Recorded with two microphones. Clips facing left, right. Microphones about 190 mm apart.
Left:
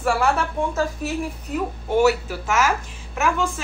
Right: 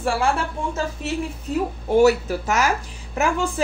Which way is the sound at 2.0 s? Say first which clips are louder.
Right 2 dB; 40° right (ahead or behind).